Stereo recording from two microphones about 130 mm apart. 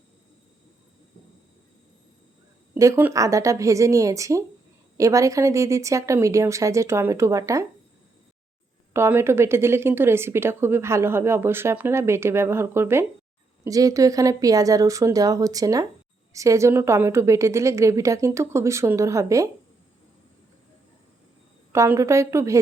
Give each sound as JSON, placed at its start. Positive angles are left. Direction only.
{"t": 2.7, "sound": "a woman's voice", "side_deg": -25}
{"t": 8.9, "sound": "a woman's voice", "side_deg": -20}
{"t": 21.7, "sound": "a woman's voice", "side_deg": -20}